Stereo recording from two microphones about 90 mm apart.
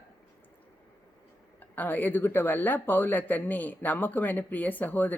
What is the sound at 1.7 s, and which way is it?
Speech, 20° left (ahead or behind).